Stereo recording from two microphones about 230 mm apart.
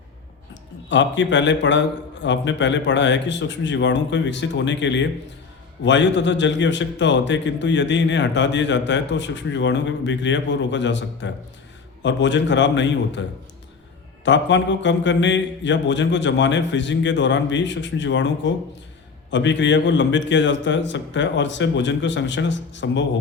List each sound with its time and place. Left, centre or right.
0.9 s a man's voice: left
14.3 s a man's voice: left